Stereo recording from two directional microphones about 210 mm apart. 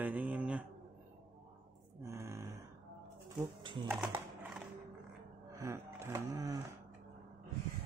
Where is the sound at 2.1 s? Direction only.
15° right (ahead or behind).